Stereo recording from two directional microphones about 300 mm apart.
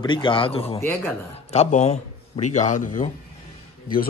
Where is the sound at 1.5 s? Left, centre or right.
Left.